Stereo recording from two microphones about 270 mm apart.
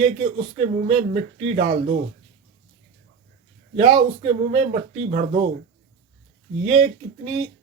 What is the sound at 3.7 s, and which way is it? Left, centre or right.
Speech, centre.